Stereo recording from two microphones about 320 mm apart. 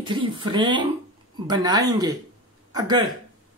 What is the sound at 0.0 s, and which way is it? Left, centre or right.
Speech, centre.